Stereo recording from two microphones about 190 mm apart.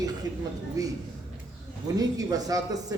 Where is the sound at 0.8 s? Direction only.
20° right (ahead or behind).